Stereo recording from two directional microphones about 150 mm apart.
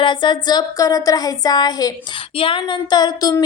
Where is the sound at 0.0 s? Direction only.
30° left (ahead or behind).